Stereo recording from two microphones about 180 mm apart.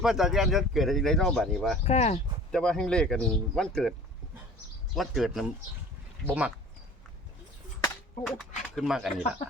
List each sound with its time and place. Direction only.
0.0 s speech: centre (ahead or behind)
1.8 s speech: 35° left (ahead or behind)
2.5 s speech: 5° left (ahead or behind)
4.9 s speech: centre (ahead or behind)
8.3 s speech: centre (ahead or behind)